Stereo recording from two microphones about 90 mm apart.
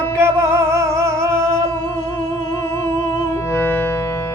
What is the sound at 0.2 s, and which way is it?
Music, 30° right (ahead or behind).